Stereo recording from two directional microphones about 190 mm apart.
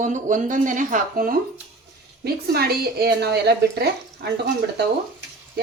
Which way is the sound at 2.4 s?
55° right (ahead or behind).